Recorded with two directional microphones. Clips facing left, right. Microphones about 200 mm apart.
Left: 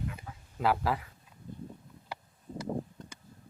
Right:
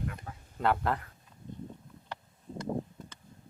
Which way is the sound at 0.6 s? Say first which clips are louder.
Even; 5° left (ahead or behind).